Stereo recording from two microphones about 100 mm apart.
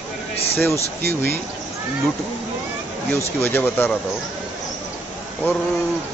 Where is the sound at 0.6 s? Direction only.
25° left (ahead or behind).